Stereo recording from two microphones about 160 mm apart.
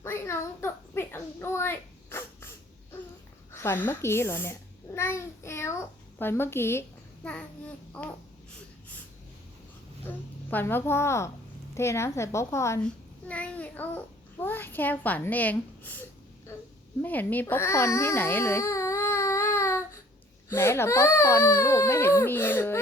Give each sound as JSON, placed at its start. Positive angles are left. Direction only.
{"t": 0.0, "sound": "a sound", "side_deg": 15}
{"t": 3.5, "sound": "speech", "side_deg": 15}
{"t": 4.9, "sound": "child singing", "side_deg": 15}
{"t": 6.1, "sound": "speech", "side_deg": 15}
{"t": 10.1, "sound": "a child's voice", "side_deg": 10}
{"t": 16.5, "sound": "a sound", "side_deg": 15}
{"t": 17.0, "sound": "speech", "side_deg": 10}